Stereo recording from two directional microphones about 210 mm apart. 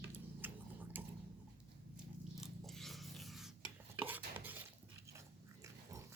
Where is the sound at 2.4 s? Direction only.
Centre (ahead or behind).